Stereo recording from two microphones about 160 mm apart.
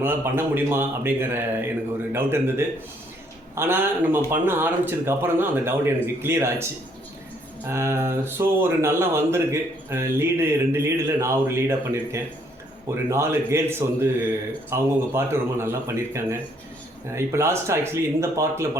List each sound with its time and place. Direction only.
0.0 s speech: 15° right (ahead or behind)
7.7 s speech: 15° right (ahead or behind)